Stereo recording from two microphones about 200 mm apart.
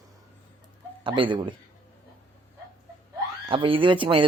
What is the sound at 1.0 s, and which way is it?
Speech, 25° right (ahead or behind).